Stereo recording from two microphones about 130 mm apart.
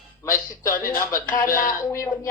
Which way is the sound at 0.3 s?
90° left.